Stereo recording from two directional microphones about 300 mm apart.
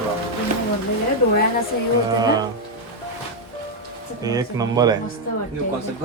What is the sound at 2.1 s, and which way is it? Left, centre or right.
Speech, centre.